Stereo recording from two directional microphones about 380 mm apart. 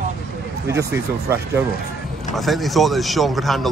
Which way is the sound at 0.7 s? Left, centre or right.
Centre.